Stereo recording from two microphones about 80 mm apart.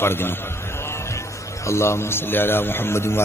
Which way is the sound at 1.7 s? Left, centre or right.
Left.